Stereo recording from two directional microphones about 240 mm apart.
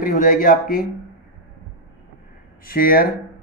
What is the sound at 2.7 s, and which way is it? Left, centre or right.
Speech, left.